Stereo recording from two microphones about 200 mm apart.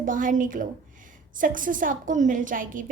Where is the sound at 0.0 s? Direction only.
40° right (ahead or behind).